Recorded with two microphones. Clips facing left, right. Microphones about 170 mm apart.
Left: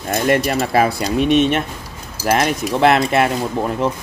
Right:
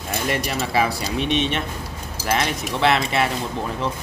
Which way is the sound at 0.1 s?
55° left (ahead or behind).